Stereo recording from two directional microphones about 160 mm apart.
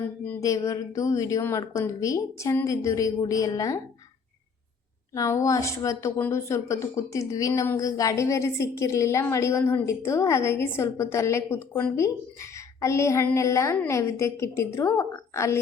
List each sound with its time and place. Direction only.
0.3 s a woman's voice: 20° left (ahead or behind)
5.1 s a woman's voice: 20° left (ahead or behind)